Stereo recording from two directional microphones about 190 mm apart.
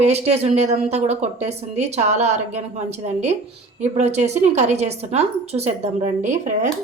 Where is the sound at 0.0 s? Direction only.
35° right (ahead or behind).